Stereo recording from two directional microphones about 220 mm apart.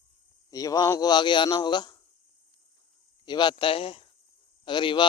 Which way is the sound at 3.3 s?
20° left (ahead or behind).